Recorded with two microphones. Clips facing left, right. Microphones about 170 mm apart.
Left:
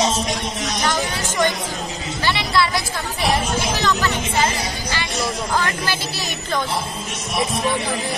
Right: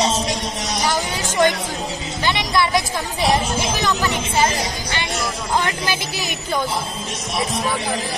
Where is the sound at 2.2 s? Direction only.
20° right (ahead or behind).